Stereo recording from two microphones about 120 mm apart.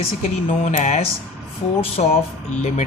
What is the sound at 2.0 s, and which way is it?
Speech, 90° left.